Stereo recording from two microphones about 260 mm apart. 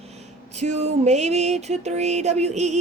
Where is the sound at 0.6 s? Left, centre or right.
Right.